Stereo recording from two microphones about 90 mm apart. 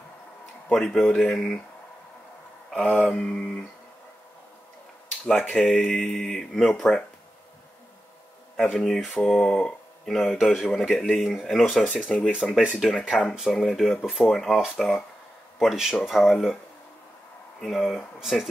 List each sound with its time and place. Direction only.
0.7 s speech: 5° left (ahead or behind)
2.7 s speech: 15° left (ahead or behind)
5.2 s speech: 20° left (ahead or behind)
5.6 s speech: centre (ahead or behind)
8.5 s speech: 10° left (ahead or behind)
11.9 s speech: 15° left (ahead or behind)
12.7 s speech: centre (ahead or behind)
17.6 s speech: centre (ahead or behind)